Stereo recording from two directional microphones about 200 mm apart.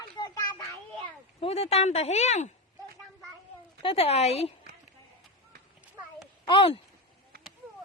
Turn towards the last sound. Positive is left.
turn(degrees=25)  # may be behind; listen again after turning